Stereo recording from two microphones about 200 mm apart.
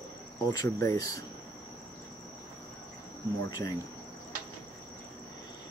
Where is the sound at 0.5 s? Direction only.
15° left (ahead or behind).